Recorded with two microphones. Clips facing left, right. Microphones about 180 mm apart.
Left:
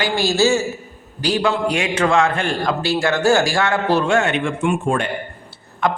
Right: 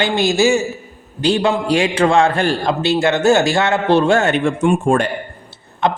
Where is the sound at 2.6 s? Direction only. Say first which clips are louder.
Right 2 dB; 20° right (ahead or behind); by 5.0 s 40° right (ahead or behind).